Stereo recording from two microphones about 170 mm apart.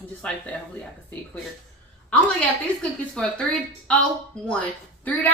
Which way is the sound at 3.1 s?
5° left (ahead or behind).